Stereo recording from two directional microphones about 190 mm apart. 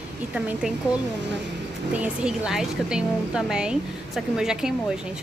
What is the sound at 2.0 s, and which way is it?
A woman's voice, 5° right (ahead or behind).